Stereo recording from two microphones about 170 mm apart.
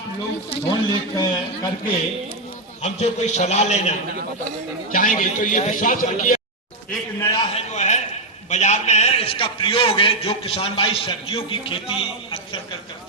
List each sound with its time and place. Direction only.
0.5 s speech: 20° left (ahead or behind)
2.8 s a man's voice: 40° left (ahead or behind)
4.9 s a man's voice: 50° left (ahead or behind)
7.2 s speech: 20° left (ahead or behind)
7.5 s a man's voice: 40° left (ahead or behind)